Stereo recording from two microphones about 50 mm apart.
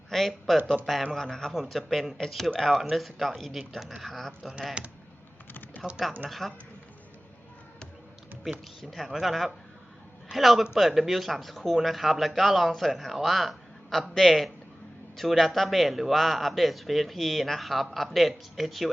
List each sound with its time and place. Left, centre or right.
0.1 s a man's voice: centre
4.8 s speech: right
5.8 s speech: centre
8.5 s speech: centre